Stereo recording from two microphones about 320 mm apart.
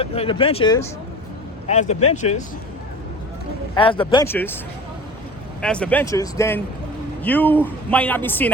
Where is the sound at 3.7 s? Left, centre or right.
Centre.